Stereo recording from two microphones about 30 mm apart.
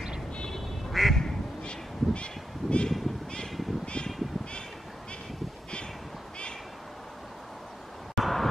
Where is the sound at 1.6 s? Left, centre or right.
Left.